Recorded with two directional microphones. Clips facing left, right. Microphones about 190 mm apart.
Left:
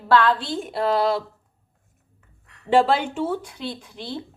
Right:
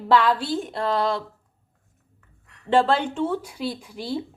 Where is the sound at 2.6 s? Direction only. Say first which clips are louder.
Left 1 dB; 10° left (ahead or behind); by 4.3 s 10° right (ahead or behind).